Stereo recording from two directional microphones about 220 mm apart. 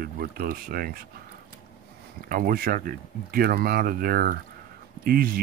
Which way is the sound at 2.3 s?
40° right (ahead or behind).